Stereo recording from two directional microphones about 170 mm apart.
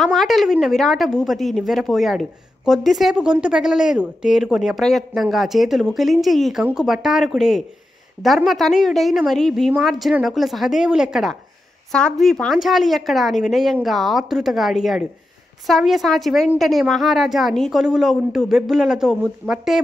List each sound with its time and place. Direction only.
0.0 s a woman's voice: centre (ahead or behind)